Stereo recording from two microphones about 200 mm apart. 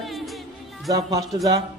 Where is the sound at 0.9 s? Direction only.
15° right (ahead or behind).